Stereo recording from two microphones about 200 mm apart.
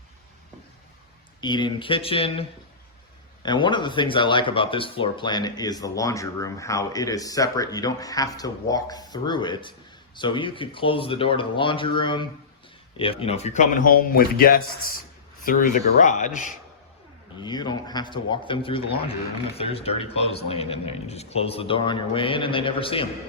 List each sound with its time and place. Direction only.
1.4 s speech: 20° left (ahead or behind); by 16.5 s 40° left (ahead or behind)
17.4 s speech: 20° left (ahead or behind)